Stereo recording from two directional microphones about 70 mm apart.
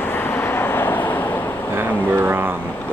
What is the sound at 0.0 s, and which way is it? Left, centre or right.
Vehicle, left.